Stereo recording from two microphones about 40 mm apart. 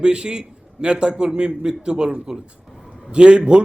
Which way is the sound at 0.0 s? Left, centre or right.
Right.